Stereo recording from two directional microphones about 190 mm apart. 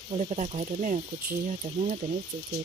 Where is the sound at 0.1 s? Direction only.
35° right (ahead or behind).